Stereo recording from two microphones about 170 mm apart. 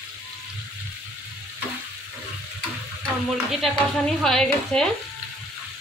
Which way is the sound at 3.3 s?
Centre (ahead or behind).